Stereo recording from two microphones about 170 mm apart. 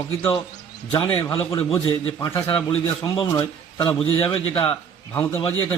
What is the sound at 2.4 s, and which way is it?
A man's voice, 30° left (ahead or behind).